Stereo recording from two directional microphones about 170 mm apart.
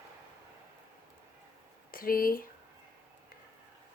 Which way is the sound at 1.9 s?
60° left (ahead or behind).